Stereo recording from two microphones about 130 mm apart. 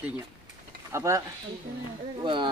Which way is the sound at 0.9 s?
20° right (ahead or behind).